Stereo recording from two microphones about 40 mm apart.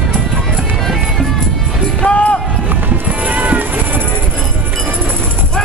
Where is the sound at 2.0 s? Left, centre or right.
Left.